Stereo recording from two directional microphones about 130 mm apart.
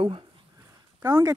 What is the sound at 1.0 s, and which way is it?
Speech, 25° right (ahead or behind).